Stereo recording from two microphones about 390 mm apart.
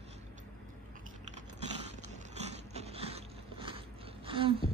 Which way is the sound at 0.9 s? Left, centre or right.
Centre.